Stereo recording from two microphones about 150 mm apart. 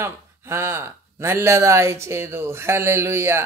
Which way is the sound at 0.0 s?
15° right (ahead or behind).